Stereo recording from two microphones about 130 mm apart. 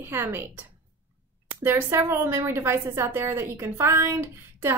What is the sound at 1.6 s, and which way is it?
A woman's voice, 20° right (ahead or behind).